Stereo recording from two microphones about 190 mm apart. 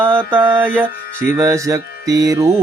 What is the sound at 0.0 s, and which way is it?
Mantra, 10° right (ahead or behind).